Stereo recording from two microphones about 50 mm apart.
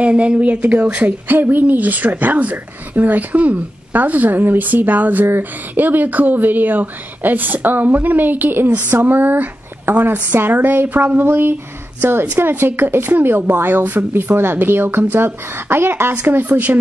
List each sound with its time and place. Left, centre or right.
0.0 s speech: right
1.2 s a woman's voice: right
16.3 s a woman's voice: right